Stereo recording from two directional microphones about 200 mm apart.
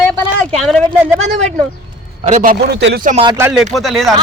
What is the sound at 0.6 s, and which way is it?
Speech, centre (ahead or behind).